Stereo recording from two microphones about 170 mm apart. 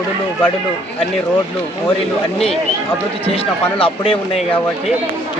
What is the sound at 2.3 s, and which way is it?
Speech, centre (ahead or behind).